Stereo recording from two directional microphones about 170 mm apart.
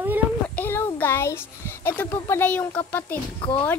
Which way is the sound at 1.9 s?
10° left (ahead or behind).